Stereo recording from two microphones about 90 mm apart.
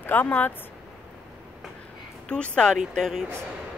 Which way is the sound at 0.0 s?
20° left (ahead or behind).